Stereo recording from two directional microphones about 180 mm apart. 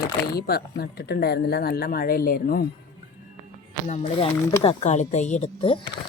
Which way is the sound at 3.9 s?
40° left (ahead or behind).